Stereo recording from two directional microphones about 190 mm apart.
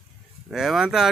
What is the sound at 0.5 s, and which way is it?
Speech, centre (ahead or behind).